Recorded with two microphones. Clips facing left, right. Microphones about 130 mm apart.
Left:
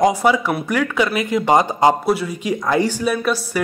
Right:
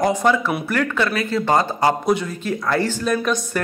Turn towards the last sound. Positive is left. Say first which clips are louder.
# left 1 dB
turn(degrees=10)  # may be behind; listen again after turning